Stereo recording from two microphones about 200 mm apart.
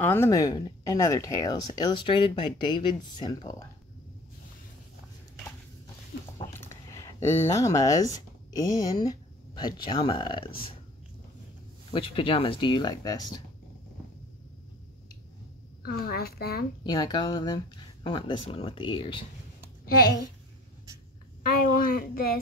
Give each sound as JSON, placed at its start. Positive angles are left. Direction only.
{"t": 0.0, "sound": "speech", "side_deg": 10}
{"t": 6.5, "sound": "a sound", "side_deg": 15}
{"t": 7.3, "sound": "speech", "side_deg": 15}
{"t": 11.9, "sound": "speech", "side_deg": 25}
{"t": 15.8, "sound": "speech", "side_deg": 50}
{"t": 16.8, "sound": "speech", "side_deg": 20}
{"t": 19.9, "sound": "speech", "side_deg": 50}
{"t": 21.4, "sound": "speech", "side_deg": 45}